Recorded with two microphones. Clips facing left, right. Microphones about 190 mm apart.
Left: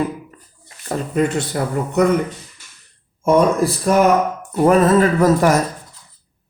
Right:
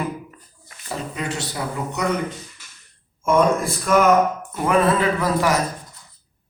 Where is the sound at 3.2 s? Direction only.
35° left (ahead or behind).